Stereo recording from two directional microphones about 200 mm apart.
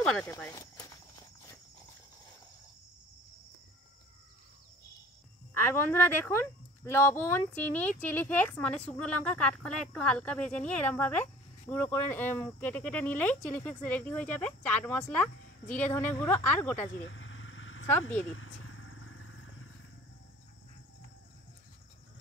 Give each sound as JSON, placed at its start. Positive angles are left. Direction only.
{"t": 0.0, "sound": "speech", "side_deg": 5}
{"t": 5.6, "sound": "speech", "side_deg": 10}
{"t": 17.1, "sound": "vehicle", "side_deg": 70}